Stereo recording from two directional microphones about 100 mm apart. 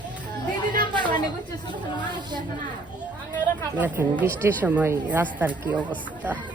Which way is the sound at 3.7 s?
20° right (ahead or behind).